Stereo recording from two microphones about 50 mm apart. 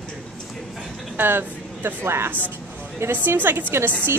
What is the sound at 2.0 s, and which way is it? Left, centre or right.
Speech, right.